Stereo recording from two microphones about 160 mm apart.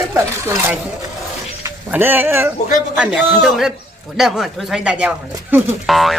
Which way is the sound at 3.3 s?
Centre (ahead or behind).